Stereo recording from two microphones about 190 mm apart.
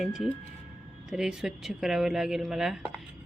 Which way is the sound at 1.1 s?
5° right (ahead or behind).